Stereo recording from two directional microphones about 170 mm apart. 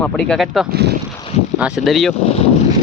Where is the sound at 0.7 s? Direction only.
75° right (ahead or behind).